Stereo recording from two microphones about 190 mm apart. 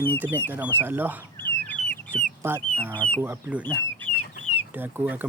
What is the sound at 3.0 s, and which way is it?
Speech, 5° left (ahead or behind).